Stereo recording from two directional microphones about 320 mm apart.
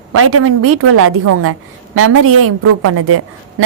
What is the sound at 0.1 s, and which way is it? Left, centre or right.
A woman's voice, right.